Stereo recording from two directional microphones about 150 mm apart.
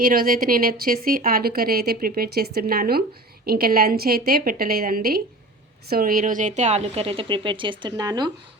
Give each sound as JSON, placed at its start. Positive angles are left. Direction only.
{"t": 0.0, "sound": "a woman's voice", "side_deg": -75}